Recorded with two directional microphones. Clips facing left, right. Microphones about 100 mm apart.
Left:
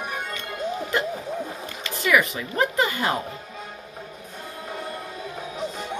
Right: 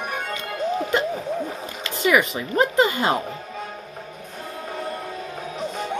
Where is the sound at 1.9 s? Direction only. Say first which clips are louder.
Right 2 dB; 20° right (ahead or behind).